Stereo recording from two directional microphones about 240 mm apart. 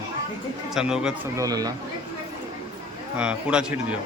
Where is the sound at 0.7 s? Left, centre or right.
Centre.